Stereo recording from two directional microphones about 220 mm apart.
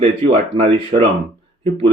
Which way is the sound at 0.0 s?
25° right (ahead or behind).